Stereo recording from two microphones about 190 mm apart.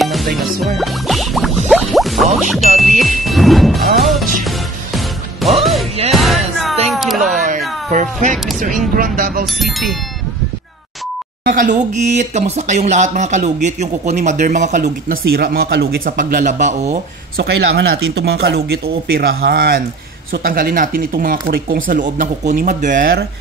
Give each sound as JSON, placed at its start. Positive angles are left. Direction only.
{"t": 0.0, "sound": "music", "side_deg": 0}
{"t": 6.9, "sound": "a sound", "side_deg": 0}
{"t": 7.9, "sound": "a sound", "side_deg": -40}
{"t": 8.9, "sound": "speech", "side_deg": -50}
{"t": 9.5, "sound": "speech", "side_deg": 0}
{"t": 11.4, "sound": "speech", "side_deg": -40}
{"t": 17.4, "sound": "speech", "side_deg": -65}